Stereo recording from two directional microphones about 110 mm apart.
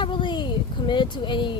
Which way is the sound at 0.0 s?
45° left (ahead or behind).